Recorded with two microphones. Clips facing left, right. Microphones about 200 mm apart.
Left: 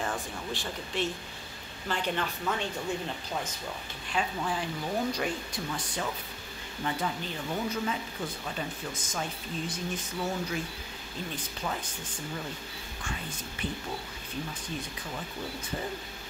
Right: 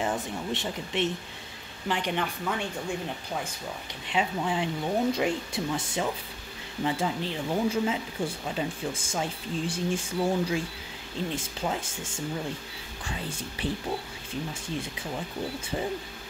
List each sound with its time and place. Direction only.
0.0 s speech: 20° right (ahead or behind)
4.1 s speech: 20° right (ahead or behind)